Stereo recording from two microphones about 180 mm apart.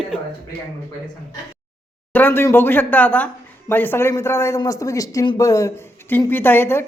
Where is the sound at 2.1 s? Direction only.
10° left (ahead or behind).